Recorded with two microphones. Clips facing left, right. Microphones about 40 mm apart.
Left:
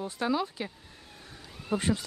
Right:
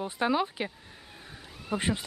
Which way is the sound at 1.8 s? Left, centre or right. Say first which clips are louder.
Even; right.